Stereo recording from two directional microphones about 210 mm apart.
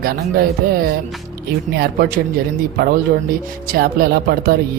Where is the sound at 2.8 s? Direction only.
45° right (ahead or behind).